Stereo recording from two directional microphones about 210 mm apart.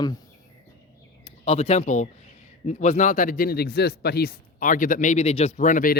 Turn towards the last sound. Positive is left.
turn(degrees=40)  # may be behind; listen again after turning